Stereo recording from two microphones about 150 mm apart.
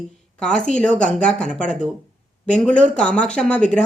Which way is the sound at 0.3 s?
5° left (ahead or behind).